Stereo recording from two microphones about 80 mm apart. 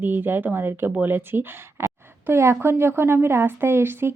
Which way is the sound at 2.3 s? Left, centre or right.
Right.